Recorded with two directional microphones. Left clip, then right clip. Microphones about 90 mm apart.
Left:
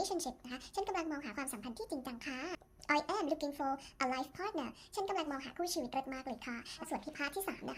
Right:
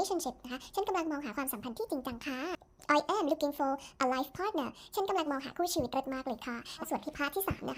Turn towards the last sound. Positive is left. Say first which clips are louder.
# right 5 dB
turn(degrees=-45)  # may be behind; listen again after turning